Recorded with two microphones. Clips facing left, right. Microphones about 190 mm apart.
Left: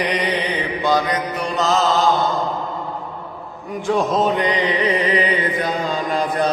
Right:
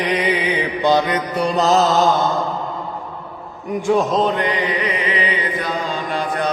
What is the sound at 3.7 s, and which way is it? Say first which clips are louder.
Speech: right 4 dB; 10° right (ahead or behind).